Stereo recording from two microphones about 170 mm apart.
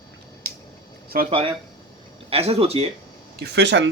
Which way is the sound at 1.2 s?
35° right (ahead or behind).